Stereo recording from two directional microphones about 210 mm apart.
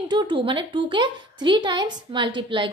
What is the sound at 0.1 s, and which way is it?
Speech, 20° right (ahead or behind).